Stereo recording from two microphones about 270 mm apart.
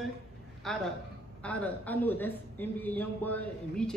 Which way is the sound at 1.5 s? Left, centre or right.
Centre.